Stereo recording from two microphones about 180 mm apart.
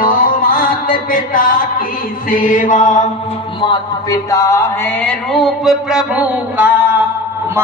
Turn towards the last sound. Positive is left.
turn(degrees=-10)  # may be behind; listen again after turning